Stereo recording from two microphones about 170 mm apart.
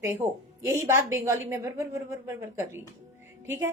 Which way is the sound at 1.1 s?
15° right (ahead or behind).